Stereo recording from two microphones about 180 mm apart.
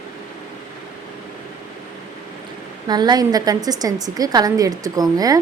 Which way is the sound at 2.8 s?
25° right (ahead or behind).